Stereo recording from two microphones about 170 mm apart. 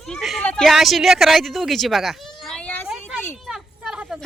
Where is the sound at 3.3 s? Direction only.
Centre (ahead or behind).